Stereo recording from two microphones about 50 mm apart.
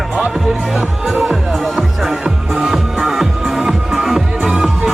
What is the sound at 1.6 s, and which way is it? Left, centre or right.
Music, centre.